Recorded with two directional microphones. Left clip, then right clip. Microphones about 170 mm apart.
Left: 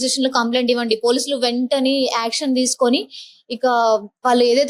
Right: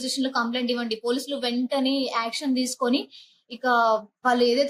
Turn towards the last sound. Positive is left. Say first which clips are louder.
# left 6 dB
turn(degrees=50)  # may be behind; listen again after turning